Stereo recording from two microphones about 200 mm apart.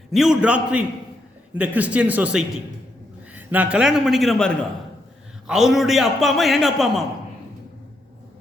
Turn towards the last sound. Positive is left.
turn(degrees=0)  # may be behind; listen again after turning